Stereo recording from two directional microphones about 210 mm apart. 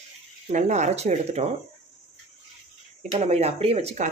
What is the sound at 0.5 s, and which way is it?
Speech, 35° right (ahead or behind).